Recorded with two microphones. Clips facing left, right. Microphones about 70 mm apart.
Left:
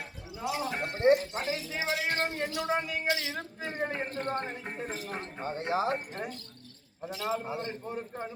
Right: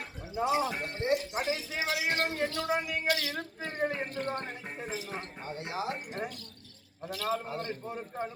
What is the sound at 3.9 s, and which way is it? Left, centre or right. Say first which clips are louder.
A man's voice: left 1 dB; left.